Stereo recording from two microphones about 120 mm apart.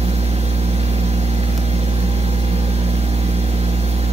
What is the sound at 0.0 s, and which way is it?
Vehicle, 60° right (ahead or behind).